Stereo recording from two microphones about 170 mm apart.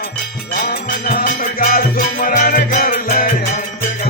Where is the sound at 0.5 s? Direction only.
60° left (ahead or behind).